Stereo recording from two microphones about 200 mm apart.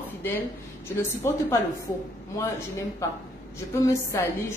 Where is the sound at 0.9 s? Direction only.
15° left (ahead or behind).